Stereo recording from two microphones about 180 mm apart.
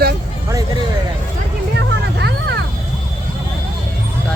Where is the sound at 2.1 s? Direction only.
75° right (ahead or behind).